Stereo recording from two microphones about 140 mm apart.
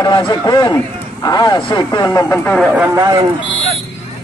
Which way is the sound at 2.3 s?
5° left (ahead or behind).